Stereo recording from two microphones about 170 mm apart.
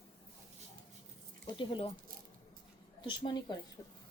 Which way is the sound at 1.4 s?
30° left (ahead or behind).